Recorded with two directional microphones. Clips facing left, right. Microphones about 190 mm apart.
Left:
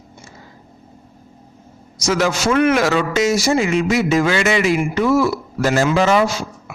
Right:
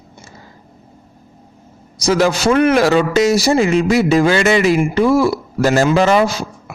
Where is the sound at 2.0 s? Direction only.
35° right (ahead or behind).